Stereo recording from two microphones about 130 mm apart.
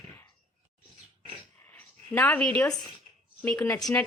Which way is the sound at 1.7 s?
15° left (ahead or behind).